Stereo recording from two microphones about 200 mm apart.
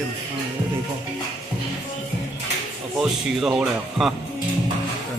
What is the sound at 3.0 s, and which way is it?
Speech, 5° right (ahead or behind).